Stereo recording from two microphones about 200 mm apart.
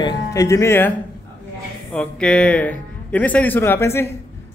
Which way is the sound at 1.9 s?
5° left (ahead or behind).